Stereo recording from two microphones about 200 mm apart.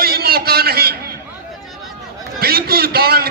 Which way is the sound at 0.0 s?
50° right (ahead or behind).